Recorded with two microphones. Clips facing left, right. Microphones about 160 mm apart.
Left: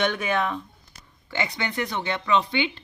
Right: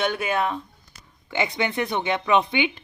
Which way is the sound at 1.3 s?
20° right (ahead or behind).